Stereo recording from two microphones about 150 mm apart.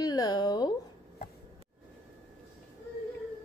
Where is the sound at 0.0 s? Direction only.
25° left (ahead or behind).